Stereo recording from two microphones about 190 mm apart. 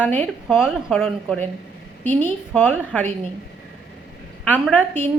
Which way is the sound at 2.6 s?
10° left (ahead or behind).